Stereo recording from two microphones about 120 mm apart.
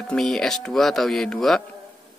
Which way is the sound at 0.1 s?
5° left (ahead or behind).